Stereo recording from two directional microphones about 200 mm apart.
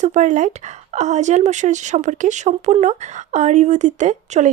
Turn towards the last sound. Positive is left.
turn(degrees=-35)  # may be behind; listen again after turning